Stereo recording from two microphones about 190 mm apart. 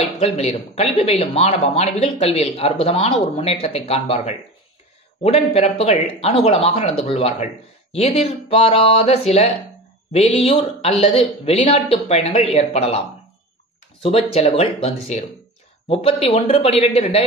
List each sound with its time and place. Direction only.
0.2 s speech: 35° left (ahead or behind)
14.0 s speech: 30° left (ahead or behind)